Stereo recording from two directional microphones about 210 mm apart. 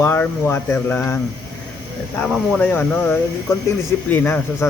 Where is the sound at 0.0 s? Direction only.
10° left (ahead or behind).